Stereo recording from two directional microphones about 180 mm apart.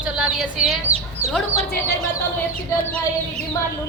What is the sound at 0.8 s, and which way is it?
Chicken, 35° right (ahead or behind).